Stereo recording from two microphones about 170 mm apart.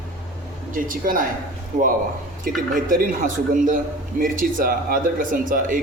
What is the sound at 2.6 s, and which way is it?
A man's voice, 55° right (ahead or behind).